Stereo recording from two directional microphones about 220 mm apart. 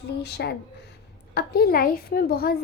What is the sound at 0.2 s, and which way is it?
A woman's voice, 50° left (ahead or behind).